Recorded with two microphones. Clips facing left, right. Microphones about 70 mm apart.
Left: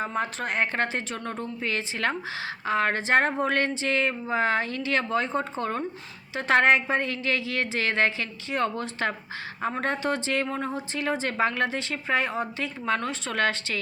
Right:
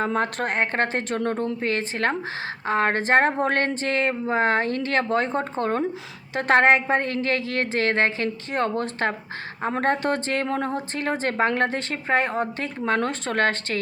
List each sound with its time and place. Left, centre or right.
0.0 s a woman's voice: right